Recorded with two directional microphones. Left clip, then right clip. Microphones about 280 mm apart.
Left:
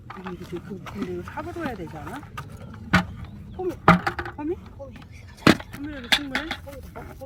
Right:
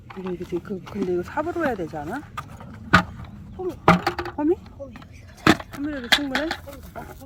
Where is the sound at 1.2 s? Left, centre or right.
Right.